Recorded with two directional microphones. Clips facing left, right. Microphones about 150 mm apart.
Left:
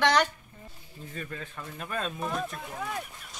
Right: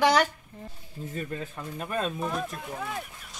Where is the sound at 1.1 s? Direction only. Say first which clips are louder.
Right 4 dB; 20° right (ahead or behind).